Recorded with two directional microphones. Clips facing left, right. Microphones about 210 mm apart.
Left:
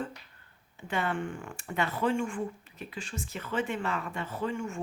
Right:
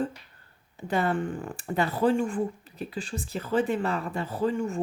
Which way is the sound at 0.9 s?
35° right (ahead or behind).